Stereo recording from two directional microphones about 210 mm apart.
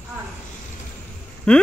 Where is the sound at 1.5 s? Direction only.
5° left (ahead or behind).